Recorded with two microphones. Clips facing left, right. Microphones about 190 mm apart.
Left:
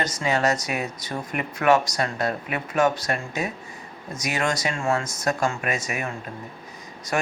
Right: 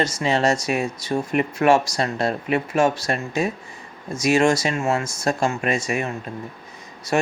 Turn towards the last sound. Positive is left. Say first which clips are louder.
# right 5 dB
turn(degrees=-25)  # may be behind; listen again after turning